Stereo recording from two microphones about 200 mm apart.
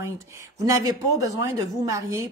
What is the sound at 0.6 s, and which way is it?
Speech, 15° right (ahead or behind).